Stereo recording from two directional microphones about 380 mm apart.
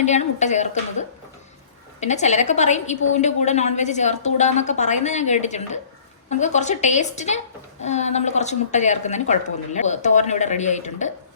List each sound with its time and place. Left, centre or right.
0.0 s a woman's voice: centre